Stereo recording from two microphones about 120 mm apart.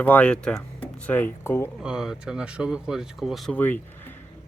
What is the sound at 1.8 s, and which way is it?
Speech, 5° right (ahead or behind).